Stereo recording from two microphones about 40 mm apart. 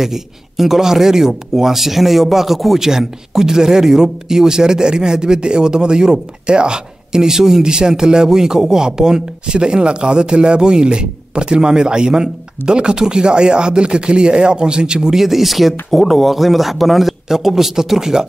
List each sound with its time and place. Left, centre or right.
0.0 s speech: centre